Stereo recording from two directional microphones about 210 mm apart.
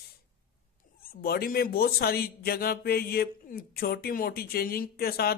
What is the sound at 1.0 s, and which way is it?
Speech, 45° left (ahead or behind).